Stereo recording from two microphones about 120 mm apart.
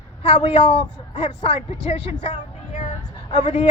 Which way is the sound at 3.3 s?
75° left (ahead or behind).